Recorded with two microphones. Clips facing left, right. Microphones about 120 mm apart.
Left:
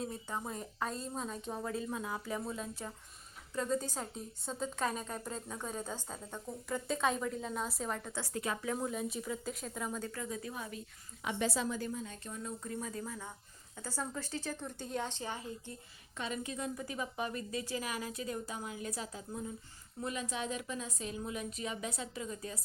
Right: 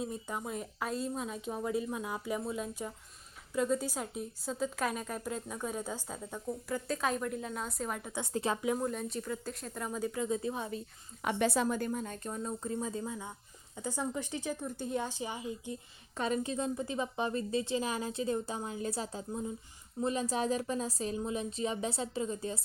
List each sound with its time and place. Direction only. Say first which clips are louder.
0.0 s a woman's voice: right 2 dB; 15° right (ahead or behind)
8.2 s a woman's voice: right 7 dB; 30° right (ahead or behind)
8.8 s a woman's voice: right 2 dB; centre (ahead or behind)
10.0 s a woman's voice: right 7 dB; 20° right (ahead or behind)
11.2 s a woman's voice: right 5 dB; 55° right (ahead or behind); by 15.8 s 15° right (ahead or behind)
16.1 s a woman's voice: right 7 dB; 40° right (ahead or behind)